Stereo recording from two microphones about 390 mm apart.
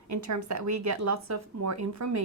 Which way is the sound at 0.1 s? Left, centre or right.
Right.